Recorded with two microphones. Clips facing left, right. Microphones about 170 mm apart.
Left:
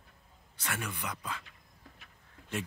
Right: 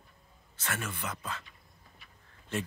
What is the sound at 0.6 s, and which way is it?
Speech, 15° left (ahead or behind).